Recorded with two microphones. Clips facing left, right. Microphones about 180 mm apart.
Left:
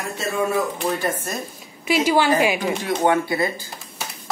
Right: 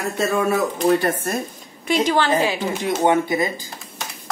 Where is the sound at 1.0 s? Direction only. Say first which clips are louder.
Right 3 dB; 60° right (ahead or behind).